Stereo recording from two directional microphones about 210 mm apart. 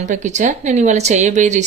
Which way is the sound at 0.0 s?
35° right (ahead or behind).